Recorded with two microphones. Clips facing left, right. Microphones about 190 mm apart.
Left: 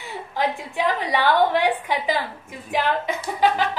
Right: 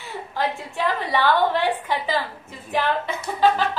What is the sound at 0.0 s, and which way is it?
A woman's voice, 15° left (ahead or behind).